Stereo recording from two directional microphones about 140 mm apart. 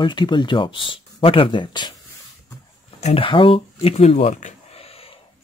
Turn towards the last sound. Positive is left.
turn(degrees=55)  # may be behind; listen again after turning